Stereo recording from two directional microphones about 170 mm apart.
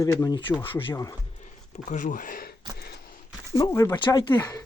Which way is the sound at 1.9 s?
50° left (ahead or behind).